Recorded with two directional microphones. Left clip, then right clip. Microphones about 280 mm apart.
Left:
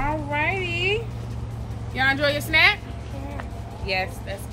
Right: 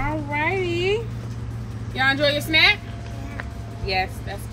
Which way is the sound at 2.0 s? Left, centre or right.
Centre.